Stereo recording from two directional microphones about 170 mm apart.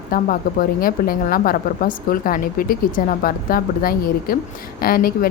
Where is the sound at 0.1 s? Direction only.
55° left (ahead or behind).